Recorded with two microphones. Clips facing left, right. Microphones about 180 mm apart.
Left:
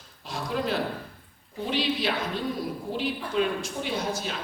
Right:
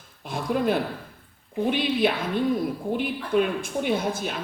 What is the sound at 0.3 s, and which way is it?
Speech, 50° right (ahead or behind).